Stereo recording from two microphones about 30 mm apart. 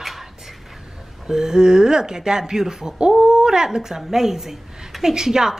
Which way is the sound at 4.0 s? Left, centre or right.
Centre.